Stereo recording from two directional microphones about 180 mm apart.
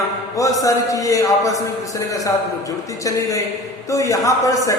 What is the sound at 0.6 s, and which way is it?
Speech, 20° left (ahead or behind).